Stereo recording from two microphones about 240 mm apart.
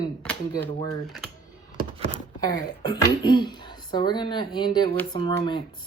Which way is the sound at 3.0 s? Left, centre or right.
Centre.